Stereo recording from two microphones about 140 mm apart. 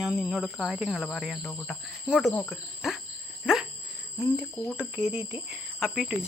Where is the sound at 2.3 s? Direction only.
15° left (ahead or behind).